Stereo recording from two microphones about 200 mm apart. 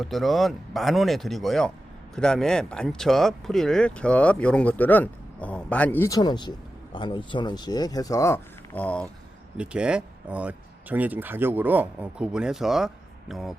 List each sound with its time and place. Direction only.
0.0 s speech: centre (ahead or behind)
9.6 s speech: 5° right (ahead or behind)